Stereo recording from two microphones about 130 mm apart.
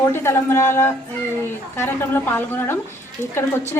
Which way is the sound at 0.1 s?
20° left (ahead or behind).